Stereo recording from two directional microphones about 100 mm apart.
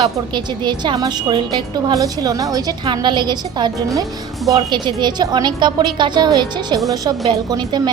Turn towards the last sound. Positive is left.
turn(degrees=-50)  # may be behind; listen again after turning